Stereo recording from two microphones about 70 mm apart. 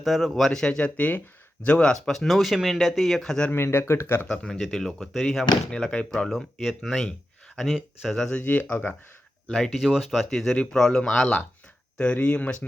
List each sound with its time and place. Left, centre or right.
0.0 s speech: centre
0.9 s speech: left
3.5 s speech: left
4.3 s speech: centre
9.5 s speech: centre